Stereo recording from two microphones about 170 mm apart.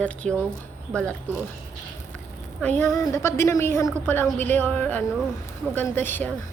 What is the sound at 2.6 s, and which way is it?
A woman's voice, 10° left (ahead or behind).